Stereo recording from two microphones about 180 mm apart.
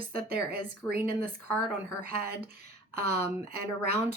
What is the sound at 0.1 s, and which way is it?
Speech, 55° right (ahead or behind).